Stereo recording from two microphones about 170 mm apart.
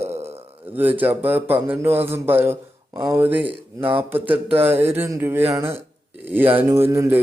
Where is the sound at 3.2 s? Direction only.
10° right (ahead or behind).